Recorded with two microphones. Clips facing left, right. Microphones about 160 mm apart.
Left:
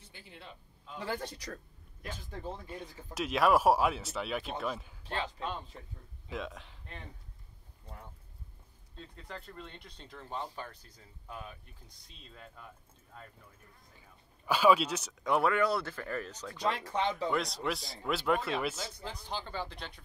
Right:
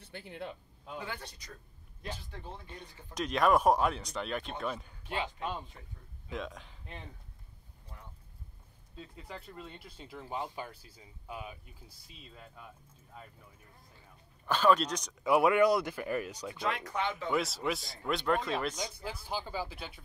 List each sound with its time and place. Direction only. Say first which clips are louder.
0.0 s speech: right 10 dB; 55° right (ahead or behind)
1.2 s speech: left 8 dB; 70° left (ahead or behind)
2.3 s speech: left 5 dB; 40° left (ahead or behind)
2.6 s speech: left 5 dB; 5° left (ahead or behind)
5.1 s speech: right 1 dB; 10° right (ahead or behind)
6.3 s speech: even; centre (ahead or behind)
8.9 s speech: even; 5° right (ahead or behind)
13.9 s a sound: right 1 dB; 10° left (ahead or behind)
15.2 s speech: right 4 dB; 10° right (ahead or behind)
16.6 s speech: left 2 dB; 30° left (ahead or behind)
17.3 s speech: right 1 dB; 5° right (ahead or behind)
18.8 s speech: right 2 dB; 10° right (ahead or behind)